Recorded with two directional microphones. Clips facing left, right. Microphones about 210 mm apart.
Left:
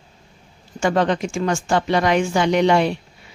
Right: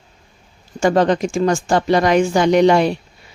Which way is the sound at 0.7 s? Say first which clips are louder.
Right 4 dB; 40° right (ahead or behind).